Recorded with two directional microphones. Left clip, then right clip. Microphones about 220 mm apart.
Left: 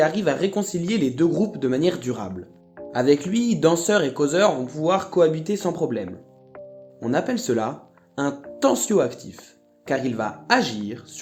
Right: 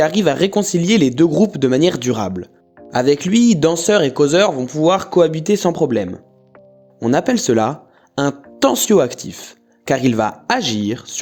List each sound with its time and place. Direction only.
0.0 s speech: 45° right (ahead or behind)